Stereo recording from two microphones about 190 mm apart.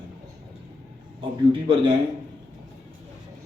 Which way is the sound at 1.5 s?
25° right (ahead or behind).